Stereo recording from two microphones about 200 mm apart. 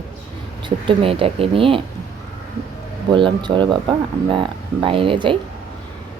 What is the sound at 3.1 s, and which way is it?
Speech, 25° right (ahead or behind).